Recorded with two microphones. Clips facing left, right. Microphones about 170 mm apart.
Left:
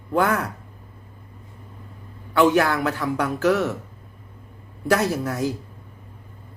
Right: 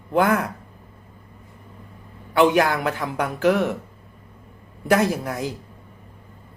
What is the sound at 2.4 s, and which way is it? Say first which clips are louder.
Speech: even; 15° right (ahead or behind).